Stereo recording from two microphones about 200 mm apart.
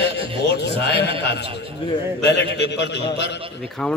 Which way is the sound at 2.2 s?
60° left (ahead or behind).